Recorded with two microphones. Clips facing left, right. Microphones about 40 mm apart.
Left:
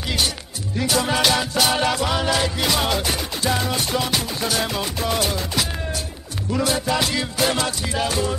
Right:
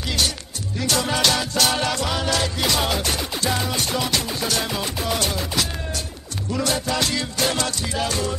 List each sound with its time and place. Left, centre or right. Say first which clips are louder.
0.7 s music: left 2 dB; centre